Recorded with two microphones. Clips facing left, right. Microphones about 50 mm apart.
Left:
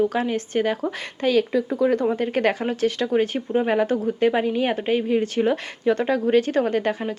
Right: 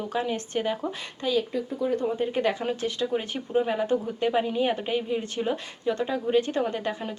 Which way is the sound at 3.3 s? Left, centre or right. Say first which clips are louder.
Left 3 dB; left.